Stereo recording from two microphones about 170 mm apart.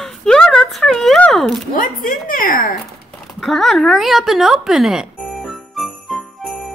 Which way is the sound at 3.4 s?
Centre (ahead or behind).